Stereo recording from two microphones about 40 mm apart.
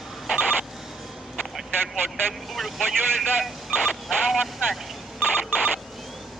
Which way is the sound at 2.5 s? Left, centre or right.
Centre.